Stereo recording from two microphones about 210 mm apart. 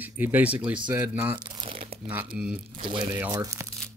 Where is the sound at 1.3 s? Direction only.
20° right (ahead or behind).